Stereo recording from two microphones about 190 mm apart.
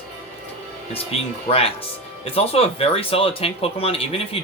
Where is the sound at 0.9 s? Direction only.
30° left (ahead or behind).